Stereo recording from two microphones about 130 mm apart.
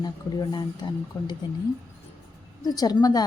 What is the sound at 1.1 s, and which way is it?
Speech, 20° left (ahead or behind).